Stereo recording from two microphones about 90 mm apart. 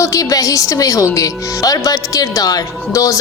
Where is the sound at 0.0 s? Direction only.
40° left (ahead or behind).